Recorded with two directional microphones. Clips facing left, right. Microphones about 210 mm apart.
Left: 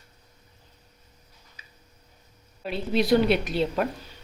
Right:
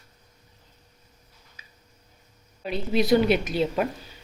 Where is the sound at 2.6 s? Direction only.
Centre (ahead or behind).